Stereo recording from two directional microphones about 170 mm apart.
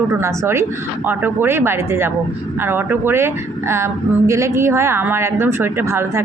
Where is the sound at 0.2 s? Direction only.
15° right (ahead or behind).